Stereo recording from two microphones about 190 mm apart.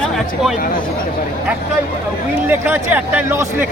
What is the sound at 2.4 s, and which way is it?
Speech, 10° right (ahead or behind).